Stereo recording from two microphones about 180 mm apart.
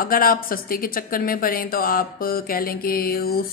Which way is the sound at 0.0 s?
55° left (ahead or behind).